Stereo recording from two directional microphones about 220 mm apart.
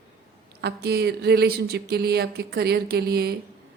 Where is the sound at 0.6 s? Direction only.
45° right (ahead or behind).